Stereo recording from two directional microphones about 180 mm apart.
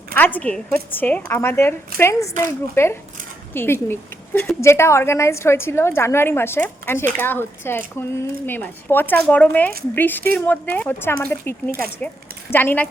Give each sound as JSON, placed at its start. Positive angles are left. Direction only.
{"t": 0.1, "sound": "a woman's voice", "side_deg": 10}